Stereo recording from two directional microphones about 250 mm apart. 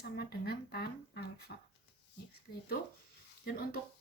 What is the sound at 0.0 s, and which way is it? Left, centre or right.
Speech, left.